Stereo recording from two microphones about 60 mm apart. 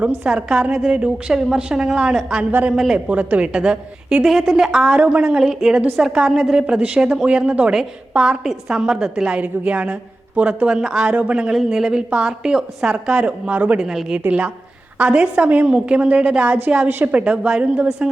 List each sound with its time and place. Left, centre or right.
0.3 s a woman's voice: centre
2.5 s a woman's voice: right
2.7 s a woman's voice: centre
3.1 s a woman's voice: right
4.9 s a woman's voice: right
5.4 s a woman's voice: centre
9.4 s a woman's voice: right
11.5 s a woman's voice: centre; by 13.7 s right
13.7 s a woman's voice: centre
14.1 s a woman's voice: right